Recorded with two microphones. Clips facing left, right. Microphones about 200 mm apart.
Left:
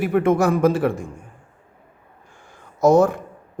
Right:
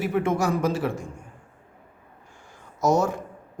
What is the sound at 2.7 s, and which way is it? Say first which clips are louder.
Speech: left 7 dB; 55° left (ahead or behind).